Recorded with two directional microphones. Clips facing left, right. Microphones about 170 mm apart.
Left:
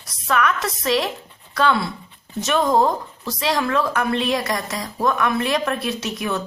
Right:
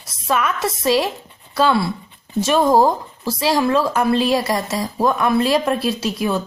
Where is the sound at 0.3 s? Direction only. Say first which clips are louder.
Right 1 dB; 25° right (ahead or behind).